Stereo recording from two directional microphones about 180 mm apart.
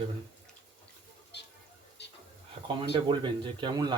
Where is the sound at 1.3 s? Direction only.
70° left (ahead or behind).